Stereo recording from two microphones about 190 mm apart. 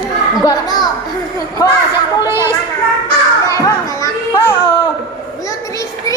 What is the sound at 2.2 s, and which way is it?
Children playing, 15° right (ahead or behind).